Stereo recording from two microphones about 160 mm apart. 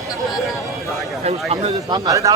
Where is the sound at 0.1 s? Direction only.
Centre (ahead or behind).